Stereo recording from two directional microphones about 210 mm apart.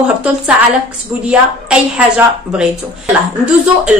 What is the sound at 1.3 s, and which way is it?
A woman's voice, 5° right (ahead or behind).